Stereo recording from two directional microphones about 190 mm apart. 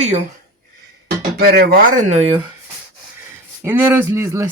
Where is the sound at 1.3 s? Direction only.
55° right (ahead or behind).